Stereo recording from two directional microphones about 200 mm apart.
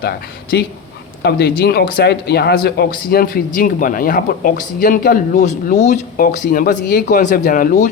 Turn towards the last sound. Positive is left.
turn(degrees=45)  # may be behind; listen again after turning